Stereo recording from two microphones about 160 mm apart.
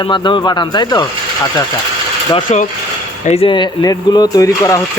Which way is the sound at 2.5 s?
45° left (ahead or behind).